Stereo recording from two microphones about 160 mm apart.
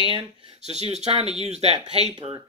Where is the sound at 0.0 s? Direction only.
35° right (ahead or behind).